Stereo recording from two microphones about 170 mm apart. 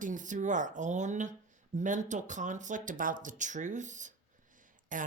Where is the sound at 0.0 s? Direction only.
50° right (ahead or behind).